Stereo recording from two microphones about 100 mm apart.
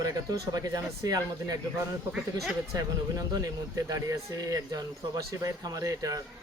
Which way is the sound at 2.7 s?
35° right (ahead or behind).